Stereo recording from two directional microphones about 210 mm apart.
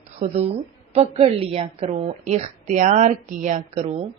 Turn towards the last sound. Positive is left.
turn(degrees=-30)  # may be behind; listen again after turning